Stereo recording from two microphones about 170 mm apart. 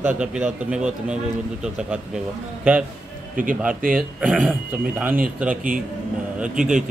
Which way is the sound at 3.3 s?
55° right (ahead or behind).